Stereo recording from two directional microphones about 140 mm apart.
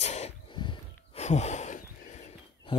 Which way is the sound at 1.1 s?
55° left (ahead or behind).